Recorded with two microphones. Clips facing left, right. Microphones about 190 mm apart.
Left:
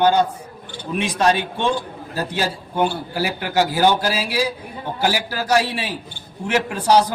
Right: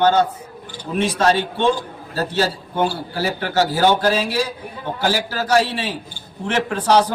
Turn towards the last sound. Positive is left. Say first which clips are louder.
# even
turn(degrees=10)  # may be behind; listen again after turning